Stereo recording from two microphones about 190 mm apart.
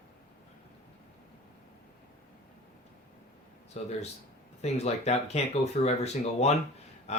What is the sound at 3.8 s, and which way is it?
Speech, 35° left (ahead or behind).